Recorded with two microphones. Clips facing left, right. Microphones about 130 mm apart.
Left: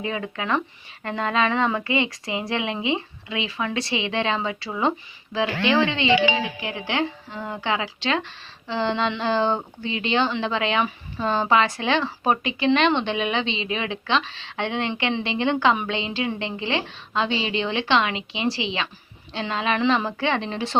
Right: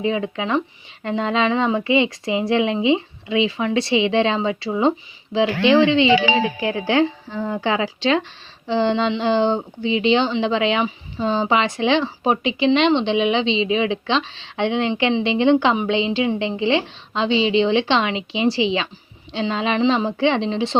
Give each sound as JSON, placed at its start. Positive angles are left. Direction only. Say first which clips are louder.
{"t": 0.0, "sound": "speech", "louder": "right 6 dB", "side_deg": -25}